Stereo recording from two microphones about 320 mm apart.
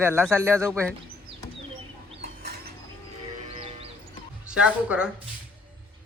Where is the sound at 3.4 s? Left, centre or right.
Centre.